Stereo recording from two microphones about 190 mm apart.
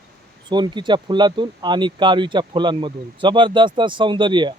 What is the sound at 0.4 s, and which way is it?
Speech, 25° right (ahead or behind).